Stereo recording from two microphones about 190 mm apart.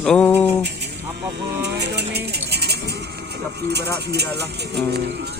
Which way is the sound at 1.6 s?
60° right (ahead or behind).